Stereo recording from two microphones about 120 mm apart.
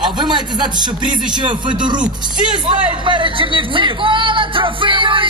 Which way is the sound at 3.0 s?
45° right (ahead or behind).